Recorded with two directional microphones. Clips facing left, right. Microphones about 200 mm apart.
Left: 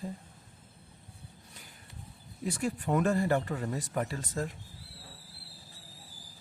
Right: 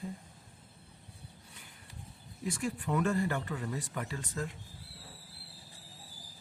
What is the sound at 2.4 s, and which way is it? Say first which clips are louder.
Speech: left 3 dB; 40° left (ahead or behind).